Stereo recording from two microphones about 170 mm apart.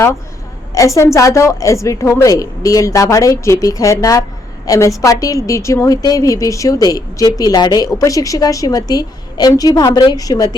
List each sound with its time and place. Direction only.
0.7 s a woman's voice: 20° left (ahead or behind)